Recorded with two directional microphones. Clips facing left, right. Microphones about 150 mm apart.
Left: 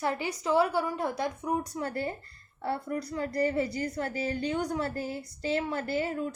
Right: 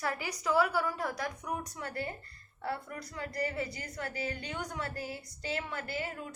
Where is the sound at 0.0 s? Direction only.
25° left (ahead or behind).